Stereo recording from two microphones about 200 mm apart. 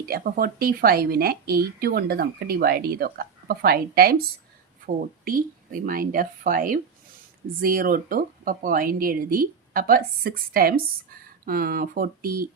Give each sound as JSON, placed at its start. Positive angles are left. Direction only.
{"t": 0.0, "sound": "speech", "side_deg": -50}
{"t": 5.8, "sound": "speech", "side_deg": -45}